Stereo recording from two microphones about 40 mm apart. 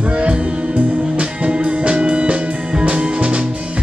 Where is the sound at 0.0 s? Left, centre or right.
Right.